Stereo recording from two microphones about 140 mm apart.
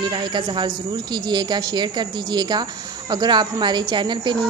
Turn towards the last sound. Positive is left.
turn(degrees=-35)  # may be behind; listen again after turning